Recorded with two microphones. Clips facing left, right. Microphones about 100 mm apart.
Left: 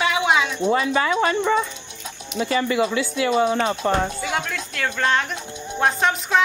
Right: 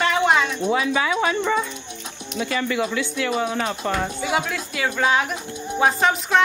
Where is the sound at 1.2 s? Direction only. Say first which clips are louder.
Left 2 dB; 5° right (ahead or behind).